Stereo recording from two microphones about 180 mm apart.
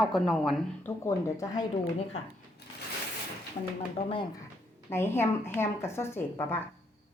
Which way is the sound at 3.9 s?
30° left (ahead or behind).